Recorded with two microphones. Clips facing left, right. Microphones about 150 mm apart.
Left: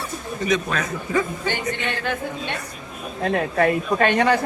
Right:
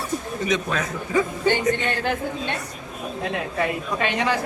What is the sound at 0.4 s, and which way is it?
Speech, 20° right (ahead or behind).